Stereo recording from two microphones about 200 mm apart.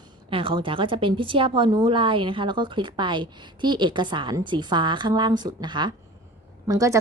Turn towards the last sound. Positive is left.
turn(degrees=-15)  # may be behind; listen again after turning